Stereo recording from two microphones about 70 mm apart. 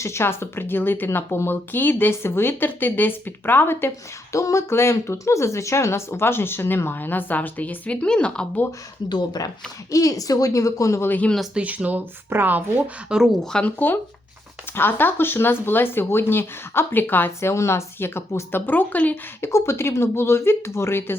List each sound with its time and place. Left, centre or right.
0.0 s a woman's voice: left
4.3 s a woman's voice: left; by 8.4 s centre
9.0 s speech: left
9.9 s a woman's voice: left
11.0 s speech: left
11.5 s speech: centre
13.1 s speech: centre
13.4 s speech: centre
13.7 s a woman's voice: left
17.5 s a woman's voice: left
19.4 s a woman's voice: left